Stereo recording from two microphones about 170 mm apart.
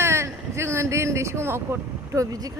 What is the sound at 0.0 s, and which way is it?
Speech, 15° right (ahead or behind).